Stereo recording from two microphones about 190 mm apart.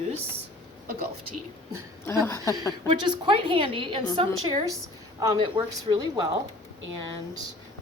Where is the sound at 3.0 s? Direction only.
25° right (ahead or behind).